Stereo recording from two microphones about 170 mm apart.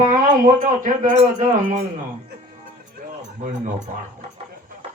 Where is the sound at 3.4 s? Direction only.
45° right (ahead or behind).